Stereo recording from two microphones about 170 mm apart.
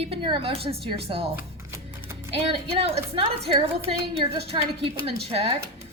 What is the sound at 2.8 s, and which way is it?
Speech, 35° right (ahead or behind).